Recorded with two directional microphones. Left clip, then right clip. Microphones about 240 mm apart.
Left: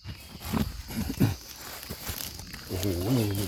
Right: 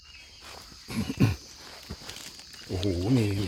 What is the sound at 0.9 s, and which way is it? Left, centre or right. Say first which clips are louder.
Horse: right 1 dB; centre.